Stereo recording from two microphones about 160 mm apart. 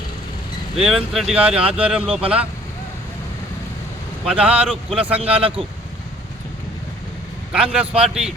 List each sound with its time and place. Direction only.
0.8 s speech: centre (ahead or behind)
4.3 s speech: 5° right (ahead or behind)
5.2 s a man's voice: 35° right (ahead or behind)
7.5 s speech: 5° right (ahead or behind)